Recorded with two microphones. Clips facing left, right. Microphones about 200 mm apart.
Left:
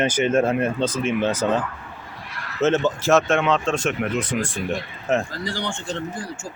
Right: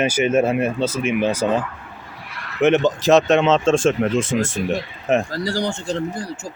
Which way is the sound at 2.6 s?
15° right (ahead or behind).